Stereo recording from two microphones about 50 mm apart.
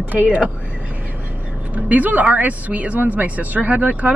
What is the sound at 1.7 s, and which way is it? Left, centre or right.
Speech, right.